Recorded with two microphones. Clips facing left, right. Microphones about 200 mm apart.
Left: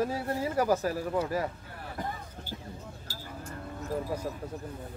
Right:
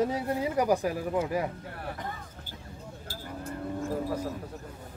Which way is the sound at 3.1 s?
55° right (ahead or behind).